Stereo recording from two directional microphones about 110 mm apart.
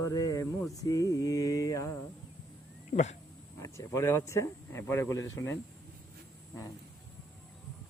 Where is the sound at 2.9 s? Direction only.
90° left.